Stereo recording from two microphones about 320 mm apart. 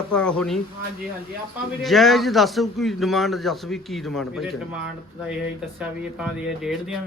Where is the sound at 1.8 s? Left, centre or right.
Centre.